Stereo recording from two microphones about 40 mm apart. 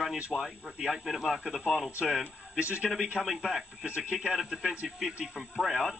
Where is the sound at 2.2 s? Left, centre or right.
Right.